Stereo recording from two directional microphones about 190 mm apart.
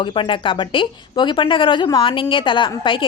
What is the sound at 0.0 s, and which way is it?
A woman's voice, 25° left (ahead or behind).